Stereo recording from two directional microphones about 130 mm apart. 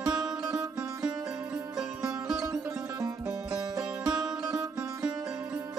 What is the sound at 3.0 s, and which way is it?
Music, 25° right (ahead or behind).